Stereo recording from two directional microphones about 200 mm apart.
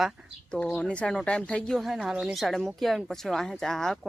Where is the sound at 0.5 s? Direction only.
5° left (ahead or behind).